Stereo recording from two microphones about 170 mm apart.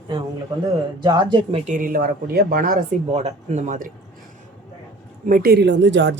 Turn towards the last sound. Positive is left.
turn(degrees=-90)